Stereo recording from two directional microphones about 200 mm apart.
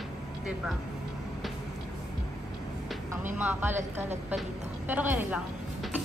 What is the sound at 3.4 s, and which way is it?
Speech, 10° right (ahead or behind).